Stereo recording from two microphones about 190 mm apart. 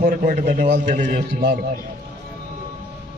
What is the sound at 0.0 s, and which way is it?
A man's voice, 45° right (ahead or behind).